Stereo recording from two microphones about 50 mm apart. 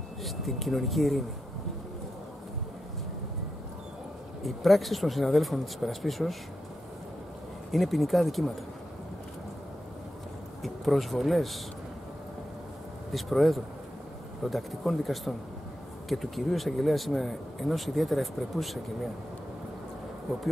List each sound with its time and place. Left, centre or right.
0.2 s speech: centre
4.4 s speech: centre
7.7 s speech: centre
10.6 s speech: centre
13.1 s speech: centre
20.3 s speech: centre